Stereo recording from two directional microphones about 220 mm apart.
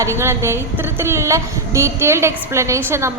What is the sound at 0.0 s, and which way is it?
A woman's voice, 10° right (ahead or behind).